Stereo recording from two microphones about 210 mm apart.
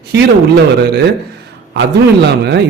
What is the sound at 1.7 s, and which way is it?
Speech, 55° right (ahead or behind).